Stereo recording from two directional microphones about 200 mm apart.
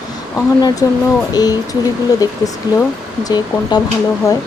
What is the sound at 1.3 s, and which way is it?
Speech, 20° left (ahead or behind).